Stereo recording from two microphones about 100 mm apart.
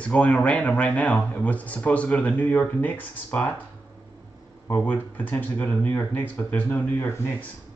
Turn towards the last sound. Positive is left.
turn(degrees=20)  # may be behind; listen again after turning